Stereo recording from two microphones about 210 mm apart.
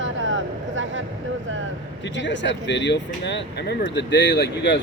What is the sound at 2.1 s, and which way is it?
Speech, 60° left (ahead or behind).